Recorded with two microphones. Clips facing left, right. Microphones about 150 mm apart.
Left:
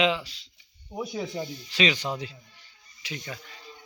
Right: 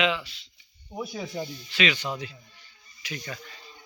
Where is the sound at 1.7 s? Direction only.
35° left (ahead or behind).